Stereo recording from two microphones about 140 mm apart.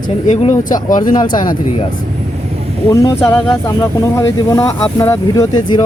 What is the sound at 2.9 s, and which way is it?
Speech, 20° left (ahead or behind).